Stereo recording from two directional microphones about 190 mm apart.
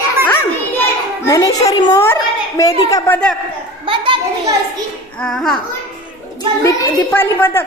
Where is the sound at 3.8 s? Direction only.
25° right (ahead or behind).